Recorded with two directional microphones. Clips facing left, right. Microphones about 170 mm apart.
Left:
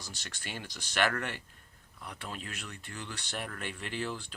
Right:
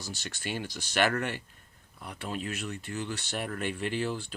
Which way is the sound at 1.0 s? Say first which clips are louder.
Right 3 dB; 20° right (ahead or behind).